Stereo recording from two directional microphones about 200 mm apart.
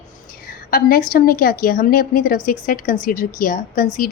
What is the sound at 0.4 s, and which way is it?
Speech, 45° left (ahead or behind).